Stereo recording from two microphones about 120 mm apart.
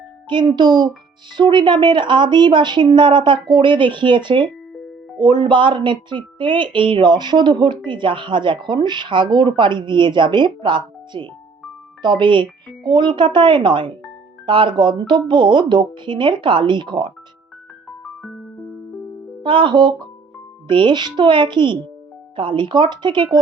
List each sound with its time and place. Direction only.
0.3 s speech: 40° right (ahead or behind)
17.8 s music: centre (ahead or behind)
19.4 s speech: 45° right (ahead or behind)